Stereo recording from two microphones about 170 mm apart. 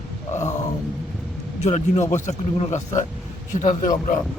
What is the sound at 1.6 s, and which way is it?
A man's voice, 45° left (ahead or behind).